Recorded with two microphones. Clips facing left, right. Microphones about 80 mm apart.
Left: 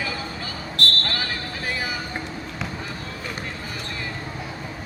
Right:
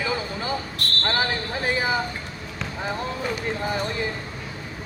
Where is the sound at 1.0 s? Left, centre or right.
Right.